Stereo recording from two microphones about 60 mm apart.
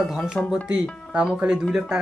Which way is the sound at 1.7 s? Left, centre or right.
Centre.